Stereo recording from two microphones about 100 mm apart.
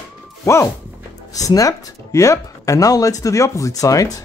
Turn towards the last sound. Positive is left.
turn(degrees=35)  # may be behind; listen again after turning